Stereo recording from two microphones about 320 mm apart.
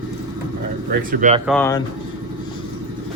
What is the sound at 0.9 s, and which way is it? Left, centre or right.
Speech, right.